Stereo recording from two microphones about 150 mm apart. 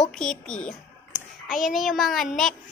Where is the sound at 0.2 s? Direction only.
5° left (ahead or behind).